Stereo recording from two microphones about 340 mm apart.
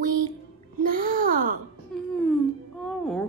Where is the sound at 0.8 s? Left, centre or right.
Right.